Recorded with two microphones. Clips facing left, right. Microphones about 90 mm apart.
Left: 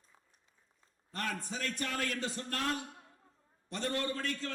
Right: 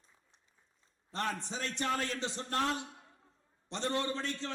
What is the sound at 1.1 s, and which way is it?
A man's voice, 25° right (ahead or behind).